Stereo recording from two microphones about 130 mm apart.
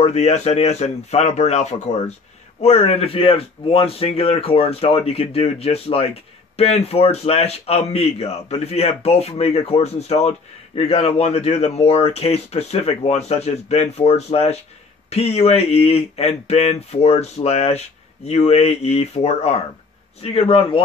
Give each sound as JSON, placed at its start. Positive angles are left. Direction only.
{"t": 0.0, "sound": "speech", "side_deg": 60}